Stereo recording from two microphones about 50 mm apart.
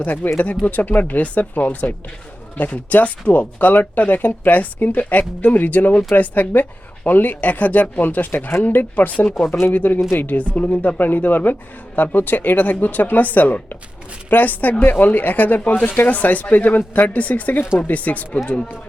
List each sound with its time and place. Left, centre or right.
0.0 s speech: left
9.5 s speech: left
9.7 s speech: left